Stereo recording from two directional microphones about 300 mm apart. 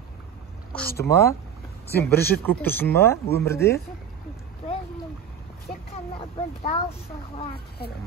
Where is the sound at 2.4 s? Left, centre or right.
Centre.